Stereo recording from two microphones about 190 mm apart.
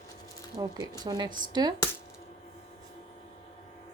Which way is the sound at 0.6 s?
20° right (ahead or behind).